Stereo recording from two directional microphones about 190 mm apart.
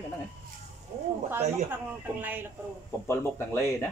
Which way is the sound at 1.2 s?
10° right (ahead or behind).